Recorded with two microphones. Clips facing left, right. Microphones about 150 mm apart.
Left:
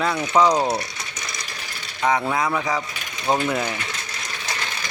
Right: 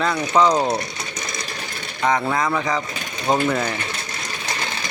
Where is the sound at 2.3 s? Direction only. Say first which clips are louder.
Right 1 dB; 10° left (ahead or behind).